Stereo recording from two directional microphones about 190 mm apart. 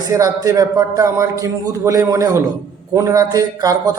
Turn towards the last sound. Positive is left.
turn(degrees=-20)  # may be behind; listen again after turning